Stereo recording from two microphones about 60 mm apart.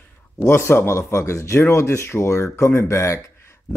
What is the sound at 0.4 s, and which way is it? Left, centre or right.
Speech, left.